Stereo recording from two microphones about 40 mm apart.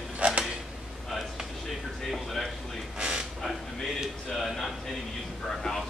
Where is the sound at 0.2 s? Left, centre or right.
Right.